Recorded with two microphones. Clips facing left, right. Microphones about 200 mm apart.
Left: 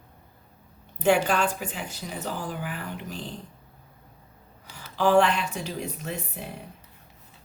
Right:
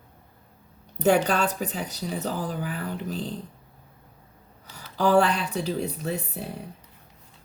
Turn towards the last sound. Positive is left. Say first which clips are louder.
# right 4 dB
turn(degrees=-35)  # may be behind; listen again after turning